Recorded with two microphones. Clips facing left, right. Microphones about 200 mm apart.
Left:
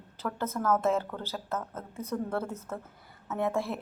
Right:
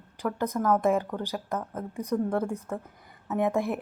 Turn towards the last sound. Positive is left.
turn(degrees=-15)  # may be behind; listen again after turning